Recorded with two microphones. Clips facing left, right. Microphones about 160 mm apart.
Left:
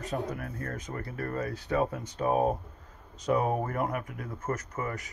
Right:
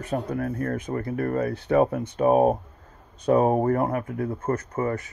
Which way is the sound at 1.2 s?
55° right (ahead or behind).